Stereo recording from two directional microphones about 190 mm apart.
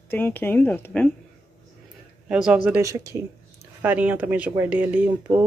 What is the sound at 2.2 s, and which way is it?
Speech, 5° right (ahead or behind).